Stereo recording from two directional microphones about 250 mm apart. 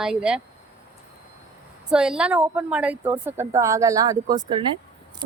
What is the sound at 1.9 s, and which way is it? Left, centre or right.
A woman's voice, centre.